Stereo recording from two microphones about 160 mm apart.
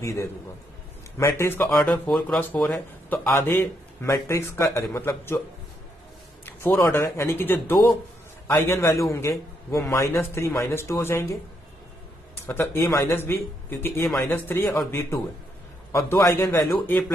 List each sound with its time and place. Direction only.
0.0 s a man's voice: 15° left (ahead or behind)
6.6 s a man's voice: 15° left (ahead or behind)
12.4 s a man's voice: 15° left (ahead or behind)